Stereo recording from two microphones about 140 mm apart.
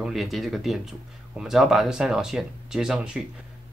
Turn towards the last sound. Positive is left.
turn(degrees=-5)  # may be behind; listen again after turning